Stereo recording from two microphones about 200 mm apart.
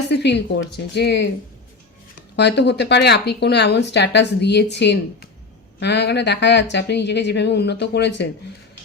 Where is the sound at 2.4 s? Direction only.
60° left (ahead or behind).